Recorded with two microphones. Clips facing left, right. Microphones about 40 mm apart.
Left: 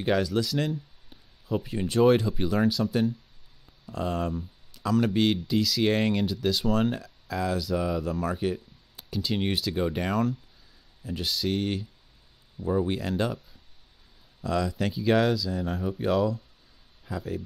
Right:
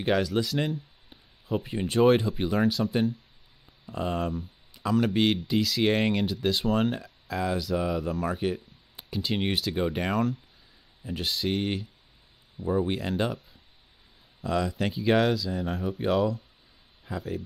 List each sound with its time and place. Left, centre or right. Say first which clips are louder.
0.0 s speech: even; centre
4.2 s speech: even; centre
4.7 s a sound: even; right
5.0 s speech: even; centre
12.5 s speech: even; centre
14.4 s speech: even; centre
16.0 s speech: even; centre